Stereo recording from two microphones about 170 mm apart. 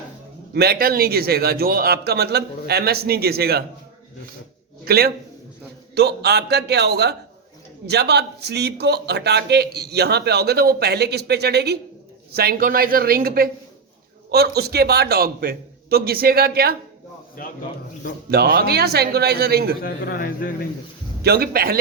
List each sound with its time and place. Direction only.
0.5 s a man's voice: 65° right (ahead or behind)
4.9 s speech: 65° right (ahead or behind)
5.9 s a man's voice: 75° right (ahead or behind); by 13.5 s 60° right (ahead or behind)
14.3 s a man's voice: 70° right (ahead or behind)
18.3 s a man's voice: 65° right (ahead or behind)
19.8 s a man's voice: 60° left (ahead or behind)
21.2 s speech: 65° right (ahead or behind)